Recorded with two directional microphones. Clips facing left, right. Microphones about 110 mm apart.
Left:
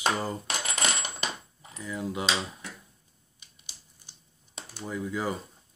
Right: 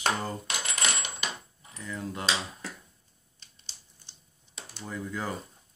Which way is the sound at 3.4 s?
10° left (ahead or behind).